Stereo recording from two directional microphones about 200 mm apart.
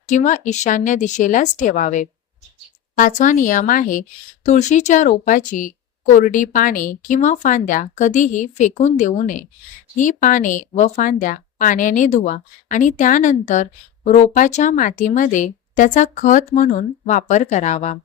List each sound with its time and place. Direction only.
0.1 s speech: 40° left (ahead or behind)